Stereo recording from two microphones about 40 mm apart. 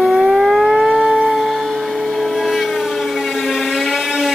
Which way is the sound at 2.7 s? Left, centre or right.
Centre.